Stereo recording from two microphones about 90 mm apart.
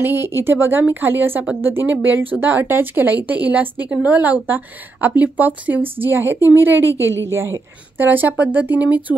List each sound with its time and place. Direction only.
0.0 s a woman's voice: 25° right (ahead or behind)